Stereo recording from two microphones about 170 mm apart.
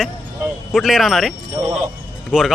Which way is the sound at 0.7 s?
Centre (ahead or behind).